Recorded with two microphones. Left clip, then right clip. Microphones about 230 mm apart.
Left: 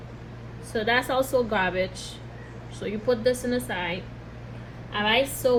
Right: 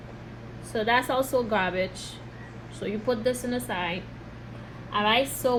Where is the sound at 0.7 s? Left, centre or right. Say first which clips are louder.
Even; right.